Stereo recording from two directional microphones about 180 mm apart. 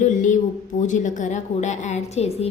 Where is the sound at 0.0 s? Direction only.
45° left (ahead or behind).